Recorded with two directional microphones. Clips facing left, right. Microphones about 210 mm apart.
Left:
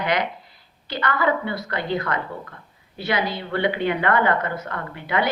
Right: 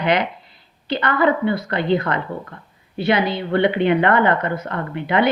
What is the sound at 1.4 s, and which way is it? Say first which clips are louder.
A woman's voice: right 7 dB; 25° right (ahead or behind).